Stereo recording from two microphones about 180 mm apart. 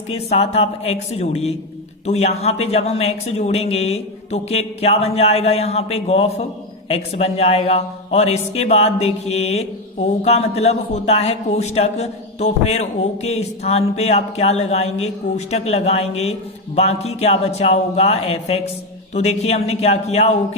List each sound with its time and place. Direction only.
0.1 s a man's voice: 35° left (ahead or behind)